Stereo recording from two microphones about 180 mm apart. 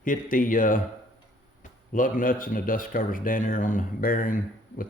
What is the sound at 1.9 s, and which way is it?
Speech, 50° left (ahead or behind).